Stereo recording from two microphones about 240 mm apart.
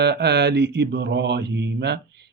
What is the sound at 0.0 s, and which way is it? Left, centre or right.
Speech, right.